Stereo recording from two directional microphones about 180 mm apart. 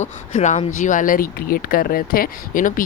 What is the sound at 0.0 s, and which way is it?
Speech, 40° left (ahead or behind).